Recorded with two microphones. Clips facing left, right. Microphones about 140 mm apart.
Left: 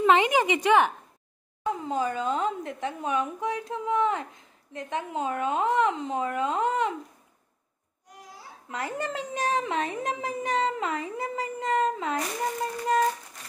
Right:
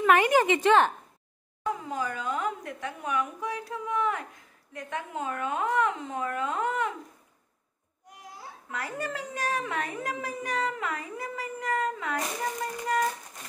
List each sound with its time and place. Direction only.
0.0 s a woman's voice: 20° left (ahead or behind)
1.6 s speech: 25° left (ahead or behind)
8.6 s speech: 20° left (ahead or behind)